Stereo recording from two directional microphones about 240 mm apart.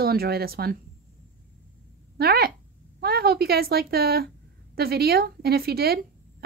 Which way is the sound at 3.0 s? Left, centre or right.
Right.